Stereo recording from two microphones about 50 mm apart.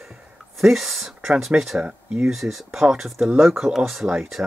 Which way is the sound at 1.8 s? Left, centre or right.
Centre.